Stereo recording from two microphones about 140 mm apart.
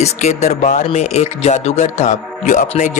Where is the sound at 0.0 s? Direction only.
55° left (ahead or behind).